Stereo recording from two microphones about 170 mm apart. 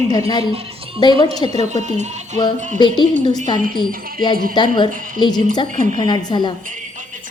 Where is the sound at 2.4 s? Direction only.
25° left (ahead or behind).